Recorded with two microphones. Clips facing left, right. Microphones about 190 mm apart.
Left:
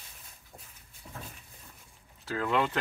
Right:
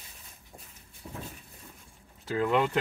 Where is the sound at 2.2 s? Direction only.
20° right (ahead or behind).